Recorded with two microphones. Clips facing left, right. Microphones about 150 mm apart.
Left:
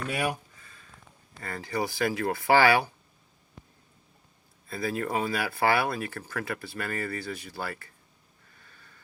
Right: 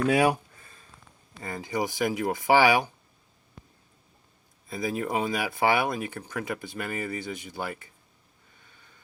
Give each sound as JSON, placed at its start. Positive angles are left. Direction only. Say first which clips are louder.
{"t": 0.1, "sound": "speech", "louder": "right 7 dB", "side_deg": -90}
{"t": 1.4, "sound": "speech", "louder": "right 1 dB", "side_deg": -15}
{"t": 4.7, "sound": "speech", "louder": "right 1 dB", "side_deg": -15}